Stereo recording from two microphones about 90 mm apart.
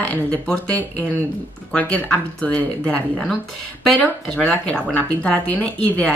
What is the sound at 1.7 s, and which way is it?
Speech, 15° left (ahead or behind).